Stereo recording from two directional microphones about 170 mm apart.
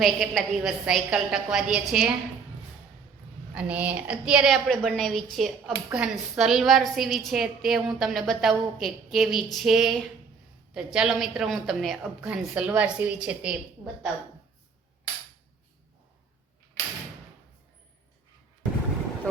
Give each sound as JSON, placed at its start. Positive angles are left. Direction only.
{"t": 0.0, "sound": "a woman's voice", "side_deg": 0}
{"t": 3.5, "sound": "a woman's voice", "side_deg": -10}
{"t": 16.8, "sound": "door", "side_deg": 15}